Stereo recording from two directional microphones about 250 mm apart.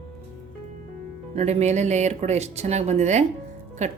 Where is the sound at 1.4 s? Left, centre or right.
Right.